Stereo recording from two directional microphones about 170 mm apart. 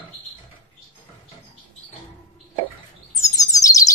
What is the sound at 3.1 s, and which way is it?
Bird, 20° left (ahead or behind).